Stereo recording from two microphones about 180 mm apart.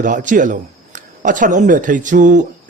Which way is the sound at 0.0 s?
45° right (ahead or behind).